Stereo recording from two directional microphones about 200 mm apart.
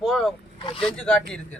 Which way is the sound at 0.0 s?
Centre (ahead or behind).